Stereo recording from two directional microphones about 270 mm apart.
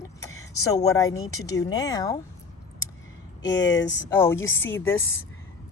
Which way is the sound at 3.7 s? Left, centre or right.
Left.